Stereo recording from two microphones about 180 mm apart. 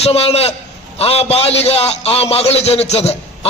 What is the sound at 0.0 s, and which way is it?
A man's voice, 35° left (ahead or behind).